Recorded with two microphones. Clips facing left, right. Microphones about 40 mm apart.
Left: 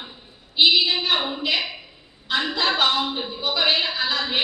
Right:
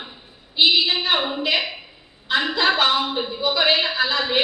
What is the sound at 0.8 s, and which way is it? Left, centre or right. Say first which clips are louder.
Speech: right 1 dB; right.